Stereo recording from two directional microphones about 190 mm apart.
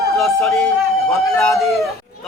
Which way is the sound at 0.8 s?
Centre (ahead or behind).